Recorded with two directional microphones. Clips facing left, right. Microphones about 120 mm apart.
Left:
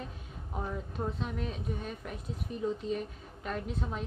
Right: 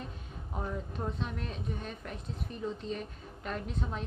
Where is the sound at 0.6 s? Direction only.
5° left (ahead or behind).